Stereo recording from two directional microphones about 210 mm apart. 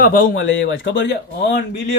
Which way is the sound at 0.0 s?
40° left (ahead or behind).